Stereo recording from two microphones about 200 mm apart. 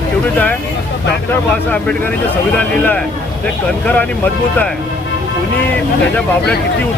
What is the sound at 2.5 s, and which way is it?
Speech, 5° left (ahead or behind).